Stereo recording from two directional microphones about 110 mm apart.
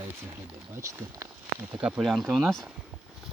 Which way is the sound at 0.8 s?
30° right (ahead or behind).